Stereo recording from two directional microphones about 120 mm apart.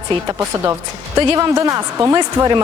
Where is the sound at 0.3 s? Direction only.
25° right (ahead or behind).